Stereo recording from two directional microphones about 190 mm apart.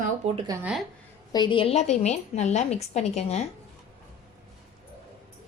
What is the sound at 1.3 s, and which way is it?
A woman's voice, 25° left (ahead or behind).